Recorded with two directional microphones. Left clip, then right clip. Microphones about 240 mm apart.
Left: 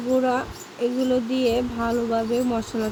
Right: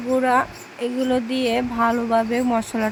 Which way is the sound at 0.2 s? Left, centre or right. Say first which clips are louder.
Right 4 dB; right.